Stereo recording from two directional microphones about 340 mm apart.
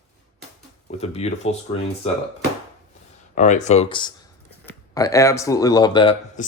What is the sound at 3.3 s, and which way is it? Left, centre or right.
Speech, left.